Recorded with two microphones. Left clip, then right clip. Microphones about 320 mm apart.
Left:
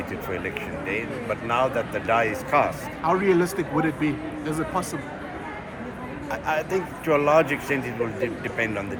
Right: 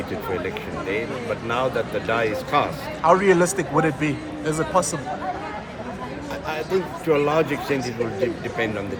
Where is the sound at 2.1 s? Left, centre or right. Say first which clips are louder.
Left 2 dB; centre.